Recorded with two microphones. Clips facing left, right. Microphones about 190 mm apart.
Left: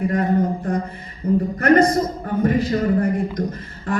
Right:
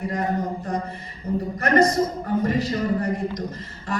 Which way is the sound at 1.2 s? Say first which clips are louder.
Left 7 dB; 55° left (ahead or behind).